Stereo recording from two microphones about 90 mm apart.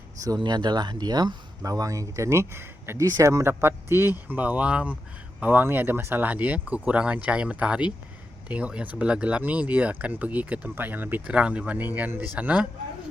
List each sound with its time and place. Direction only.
0.4 s speech: 55° right (ahead or behind); by 3.0 s 25° right (ahead or behind)
3.0 s speech: 35° right (ahead or behind); by 12.6 s 15° right (ahead or behind)